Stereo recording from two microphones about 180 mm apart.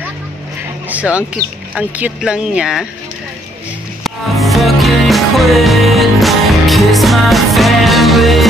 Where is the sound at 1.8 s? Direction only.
5° right (ahead or behind).